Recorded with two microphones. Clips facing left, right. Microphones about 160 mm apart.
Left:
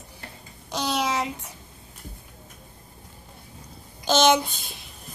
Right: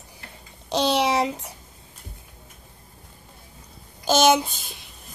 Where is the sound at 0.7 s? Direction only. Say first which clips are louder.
Right 5 dB; 25° right (ahead or behind).